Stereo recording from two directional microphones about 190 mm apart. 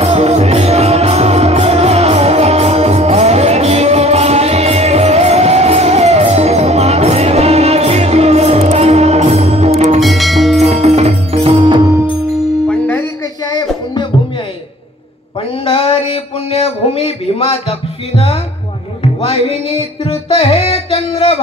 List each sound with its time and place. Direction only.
0.0 s music: 35° right (ahead or behind)
9.9 s music: centre (ahead or behind)
10.6 s music: 35° right (ahead or behind)
12.6 s music: 10° left (ahead or behind)
13.5 s music: 20° left (ahead or behind)
15.6 s a sound: 30° left (ahead or behind)
20.0 s music: 30° left (ahead or behind)